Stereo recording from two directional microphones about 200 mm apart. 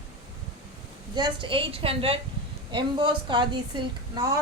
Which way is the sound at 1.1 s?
25° right (ahead or behind).